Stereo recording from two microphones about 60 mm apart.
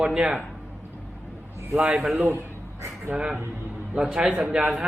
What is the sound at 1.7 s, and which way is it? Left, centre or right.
Speech, right.